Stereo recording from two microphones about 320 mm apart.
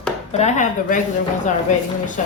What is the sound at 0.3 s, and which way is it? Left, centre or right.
Speech, left.